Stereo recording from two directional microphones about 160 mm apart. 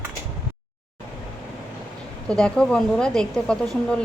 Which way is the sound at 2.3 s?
5° left (ahead or behind).